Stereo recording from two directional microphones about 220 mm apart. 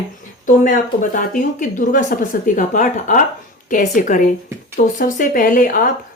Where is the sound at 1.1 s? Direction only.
35° left (ahead or behind).